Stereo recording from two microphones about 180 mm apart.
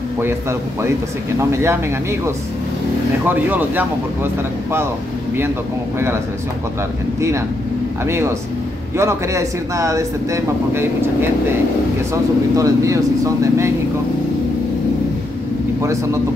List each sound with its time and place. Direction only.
0.2 s speech: 15° right (ahead or behind)
3.3 s speech: 10° right (ahead or behind)
7.2 s speech: 15° right (ahead or behind)
15.8 s speech: 15° right (ahead or behind)